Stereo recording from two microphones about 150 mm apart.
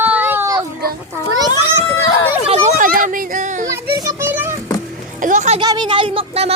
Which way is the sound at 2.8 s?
65° right (ahead or behind).